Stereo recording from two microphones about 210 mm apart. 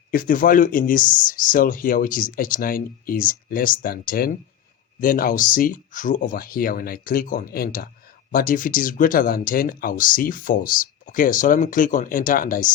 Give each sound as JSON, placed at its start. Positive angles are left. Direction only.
{"t": 0.1, "sound": "speech", "side_deg": 40}